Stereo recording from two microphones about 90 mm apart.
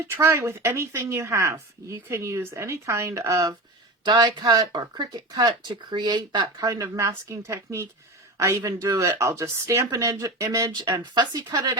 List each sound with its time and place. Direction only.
0.0 s speech: 30° right (ahead or behind)
4.0 s speech: 50° right (ahead or behind)
6.7 s speech: 40° right (ahead or behind)
11.0 s speech: 50° right (ahead or behind)